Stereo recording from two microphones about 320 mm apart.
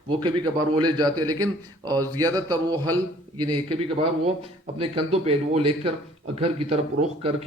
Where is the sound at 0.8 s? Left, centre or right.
Centre.